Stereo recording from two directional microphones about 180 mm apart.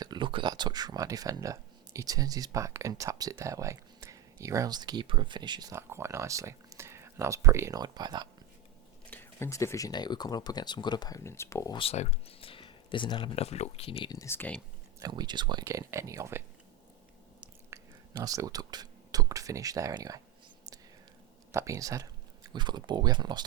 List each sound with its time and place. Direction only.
0.0 s speech: 25° right (ahead or behind)
9.0 s speech: 10° left (ahead or behind)
11.8 s speech: 35° left (ahead or behind)
14.1 s speech: 15° left (ahead or behind)
14.9 s speech: 20° right (ahead or behind)
17.7 s a sound: 15° right (ahead or behind)
18.1 s speech: 20° right (ahead or behind)
21.5 s speech: 15° right (ahead or behind)